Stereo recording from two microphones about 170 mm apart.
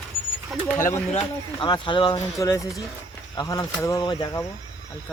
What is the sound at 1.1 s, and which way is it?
Speech, 30° left (ahead or behind).